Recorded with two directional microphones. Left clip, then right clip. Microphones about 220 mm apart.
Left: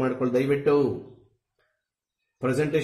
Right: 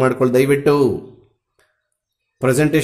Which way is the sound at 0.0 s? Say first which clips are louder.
Right 10 dB; 45° right (ahead or behind).